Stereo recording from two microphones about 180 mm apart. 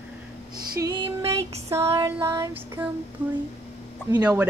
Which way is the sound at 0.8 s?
25° right (ahead or behind).